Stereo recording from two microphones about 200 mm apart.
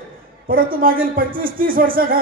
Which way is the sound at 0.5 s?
45° right (ahead or behind).